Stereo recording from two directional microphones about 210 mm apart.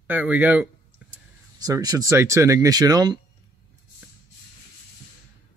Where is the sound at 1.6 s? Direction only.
15° right (ahead or behind).